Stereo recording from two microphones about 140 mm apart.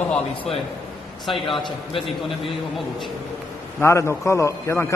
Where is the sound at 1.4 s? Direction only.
35° left (ahead or behind).